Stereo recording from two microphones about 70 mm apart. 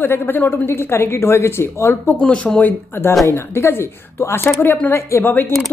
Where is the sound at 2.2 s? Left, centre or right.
Centre.